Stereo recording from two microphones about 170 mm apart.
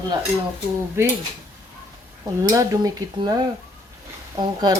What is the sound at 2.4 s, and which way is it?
Speech, 20° right (ahead or behind).